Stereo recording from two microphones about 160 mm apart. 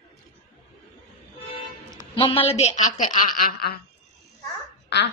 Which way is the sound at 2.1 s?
35° left (ahead or behind).